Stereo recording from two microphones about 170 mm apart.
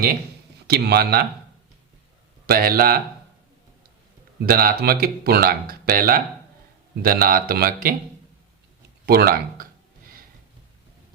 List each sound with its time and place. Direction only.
0.7 s speech: 70° right (ahead or behind)
2.5 s speech: 60° right (ahead or behind)
4.4 s speech: 65° right (ahead or behind)
9.0 s speech: 60° right (ahead or behind)